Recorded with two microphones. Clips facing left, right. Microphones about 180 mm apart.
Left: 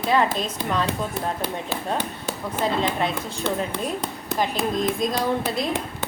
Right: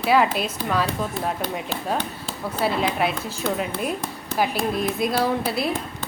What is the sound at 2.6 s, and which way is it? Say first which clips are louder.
Speech: right 1 dB; 10° right (ahead or behind).